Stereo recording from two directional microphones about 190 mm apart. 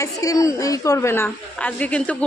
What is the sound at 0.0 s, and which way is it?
A woman's voice, 20° left (ahead or behind).